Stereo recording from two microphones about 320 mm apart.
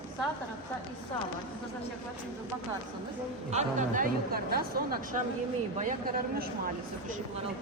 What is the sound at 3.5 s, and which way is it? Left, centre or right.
A woman's voice, right.